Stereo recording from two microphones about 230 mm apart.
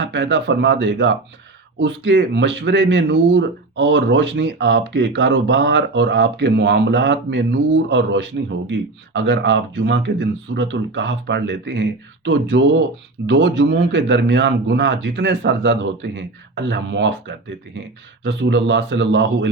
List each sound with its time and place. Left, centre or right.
0.0 s speech: right